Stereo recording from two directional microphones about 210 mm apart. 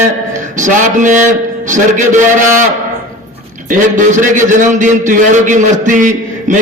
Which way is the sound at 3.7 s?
40° right (ahead or behind).